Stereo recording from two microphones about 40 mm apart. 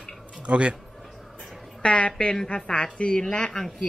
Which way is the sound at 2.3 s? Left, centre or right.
Centre.